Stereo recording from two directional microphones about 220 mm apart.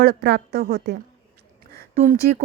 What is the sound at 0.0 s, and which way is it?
Speech, 45° right (ahead or behind).